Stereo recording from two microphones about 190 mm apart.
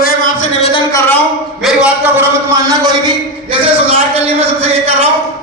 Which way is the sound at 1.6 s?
5° right (ahead or behind).